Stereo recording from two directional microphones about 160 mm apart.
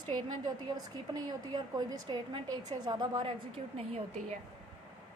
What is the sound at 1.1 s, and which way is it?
A woman's voice, 25° right (ahead or behind).